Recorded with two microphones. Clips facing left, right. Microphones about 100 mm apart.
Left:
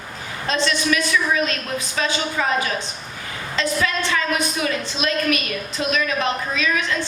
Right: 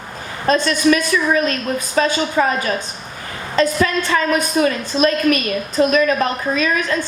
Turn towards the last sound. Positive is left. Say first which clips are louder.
# right 4 dB
turn(degrees=-40)  # may be behind; listen again after turning